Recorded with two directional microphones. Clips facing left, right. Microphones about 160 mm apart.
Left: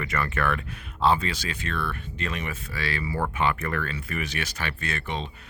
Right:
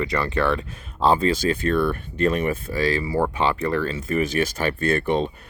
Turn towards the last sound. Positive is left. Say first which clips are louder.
# right 11 dB
turn(degrees=-50)  # may be behind; listen again after turning